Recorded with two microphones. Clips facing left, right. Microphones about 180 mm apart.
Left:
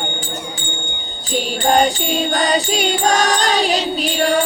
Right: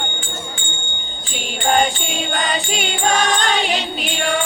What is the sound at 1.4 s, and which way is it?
Music, 40° left (ahead or behind).